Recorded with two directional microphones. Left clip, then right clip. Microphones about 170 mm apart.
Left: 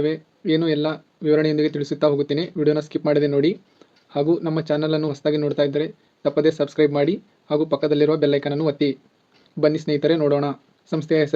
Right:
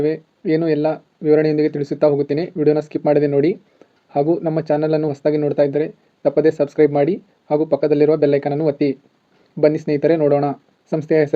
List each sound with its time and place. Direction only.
0.0 s speech: 20° right (ahead or behind)